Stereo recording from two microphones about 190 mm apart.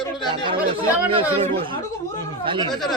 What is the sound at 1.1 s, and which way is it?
Speech, 30° right (ahead or behind).